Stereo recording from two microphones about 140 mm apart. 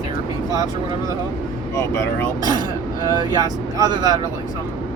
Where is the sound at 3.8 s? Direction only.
25° right (ahead or behind).